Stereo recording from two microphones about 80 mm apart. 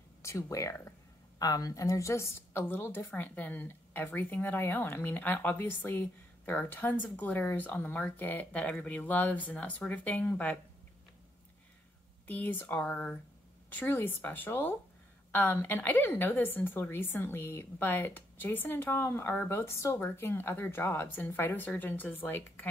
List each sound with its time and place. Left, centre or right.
0.2 s speech: left
1.4 s a woman's voice: left; by 10.6 s centre
12.3 s a woman's voice: left